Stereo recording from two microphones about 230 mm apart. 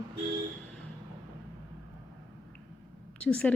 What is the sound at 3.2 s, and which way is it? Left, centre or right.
Speech, centre.